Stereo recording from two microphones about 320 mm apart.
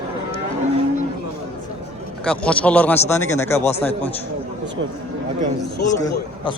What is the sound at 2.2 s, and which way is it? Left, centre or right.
A man's voice, centre.